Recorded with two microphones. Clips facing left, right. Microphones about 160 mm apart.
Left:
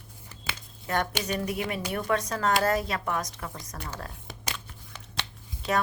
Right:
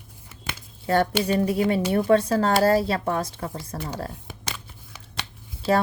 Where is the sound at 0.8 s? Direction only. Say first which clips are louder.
Right 8 dB; 30° right (ahead or behind).